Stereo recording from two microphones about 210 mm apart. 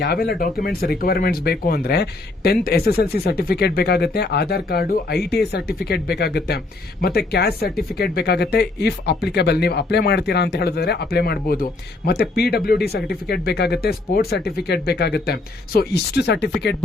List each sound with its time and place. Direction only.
0.0 s speech: 50° left (ahead or behind)